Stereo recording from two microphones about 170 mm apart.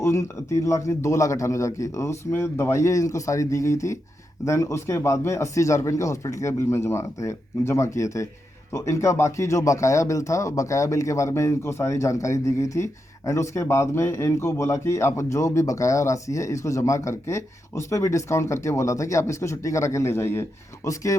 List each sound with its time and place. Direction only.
0.0 s speech: 15° left (ahead or behind)